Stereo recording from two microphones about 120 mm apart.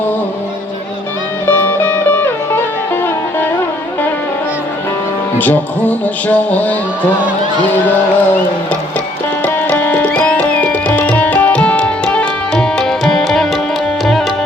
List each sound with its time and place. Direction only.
1.5 s music: 15° left (ahead or behind)
5.4 s music: 15° left (ahead or behind)
9.5 s music: 15° left (ahead or behind)